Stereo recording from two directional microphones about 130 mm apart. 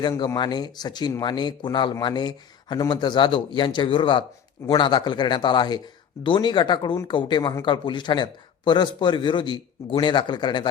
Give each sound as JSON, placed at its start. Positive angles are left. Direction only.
{"t": 0.3, "sound": "speech", "side_deg": 35}